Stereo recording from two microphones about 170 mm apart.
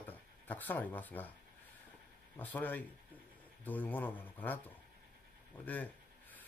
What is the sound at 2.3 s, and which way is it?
Speech, 10° left (ahead or behind).